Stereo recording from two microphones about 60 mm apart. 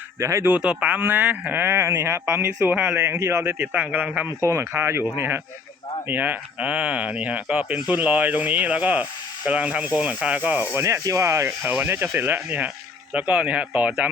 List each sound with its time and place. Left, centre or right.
0.2 s speech: right
0.6 s speech: centre
0.9 s speech: right
1.6 s speech: right
3.8 s speech: right
4.4 s speech: right
10.8 s speech: right
12.1 s speech: right